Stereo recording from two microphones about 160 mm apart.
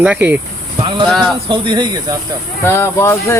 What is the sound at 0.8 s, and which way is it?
Speech, 30° right (ahead or behind).